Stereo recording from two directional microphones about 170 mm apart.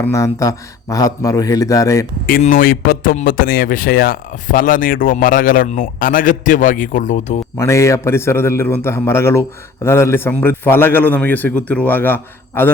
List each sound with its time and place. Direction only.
0.0 s a man's voice: 15° left (ahead or behind)
2.4 s speech: 55° left (ahead or behind)
7.5 s a man's voice: 15° left (ahead or behind)